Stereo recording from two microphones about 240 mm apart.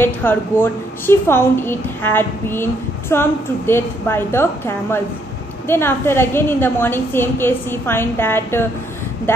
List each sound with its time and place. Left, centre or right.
0.0 s a woman's voice: centre